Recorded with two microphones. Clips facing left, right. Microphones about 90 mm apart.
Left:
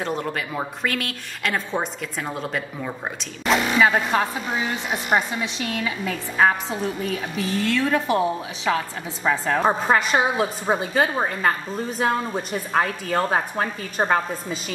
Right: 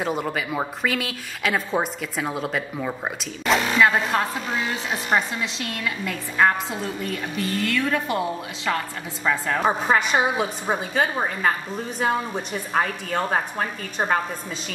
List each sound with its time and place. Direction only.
0.0 s a woman's voice: 5° right (ahead or behind)
9.2 s a woman's voice: 15° left (ahead or behind)
9.7 s a woman's voice: centre (ahead or behind)